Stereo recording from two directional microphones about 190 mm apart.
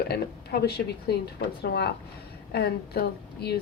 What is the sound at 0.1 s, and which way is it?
A woman's voice, 55° left (ahead or behind).